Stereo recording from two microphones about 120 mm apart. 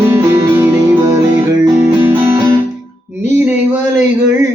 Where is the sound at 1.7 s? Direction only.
15° right (ahead or behind).